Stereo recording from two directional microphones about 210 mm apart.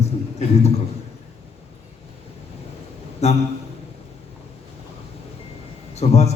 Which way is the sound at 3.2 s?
30° left (ahead or behind).